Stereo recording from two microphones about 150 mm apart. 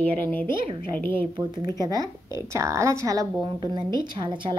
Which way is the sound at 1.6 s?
25° right (ahead or behind).